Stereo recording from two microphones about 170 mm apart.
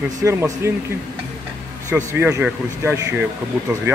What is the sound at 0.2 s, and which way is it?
Speech, 15° right (ahead or behind).